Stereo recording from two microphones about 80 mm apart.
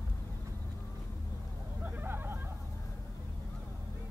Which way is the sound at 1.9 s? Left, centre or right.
Right.